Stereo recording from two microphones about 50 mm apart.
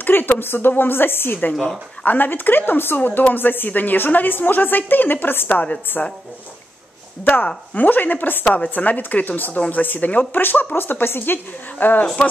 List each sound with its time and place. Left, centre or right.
0.0 s a woman's voice: left
6.0 s a woman's voice: left
7.7 s a woman's voice: left